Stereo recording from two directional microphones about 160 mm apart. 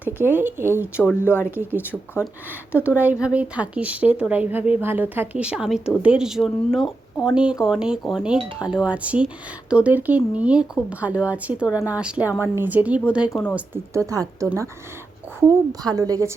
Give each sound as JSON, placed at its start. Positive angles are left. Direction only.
{"t": 0.3, "sound": "speech", "side_deg": -15}
{"t": 1.0, "sound": "speech", "side_deg": 15}
{"t": 1.5, "sound": "speech", "side_deg": -10}
{"t": 3.0, "sound": "speech", "side_deg": -10}
{"t": 14.1, "sound": "a woman's voice", "side_deg": -20}